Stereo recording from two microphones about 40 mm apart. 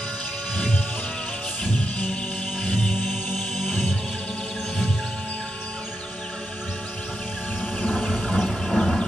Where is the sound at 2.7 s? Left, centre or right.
Centre.